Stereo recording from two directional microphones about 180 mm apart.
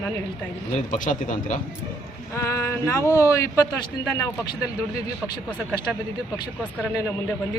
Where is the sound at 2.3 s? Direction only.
15° left (ahead or behind).